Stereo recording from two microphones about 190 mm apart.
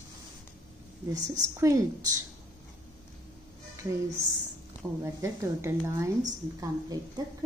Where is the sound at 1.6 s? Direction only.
15° right (ahead or behind).